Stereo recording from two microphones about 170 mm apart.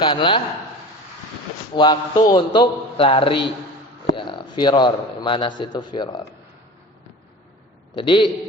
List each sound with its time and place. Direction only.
0.0 s a man's voice: 30° left (ahead or behind)
1.7 s a man's voice: 25° left (ahead or behind)
7.9 s a man's voice: 30° left (ahead or behind)